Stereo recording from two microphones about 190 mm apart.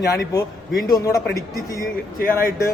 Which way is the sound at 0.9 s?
15° left (ahead or behind).